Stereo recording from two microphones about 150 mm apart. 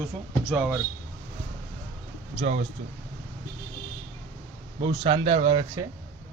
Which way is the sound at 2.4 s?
45° right (ahead or behind).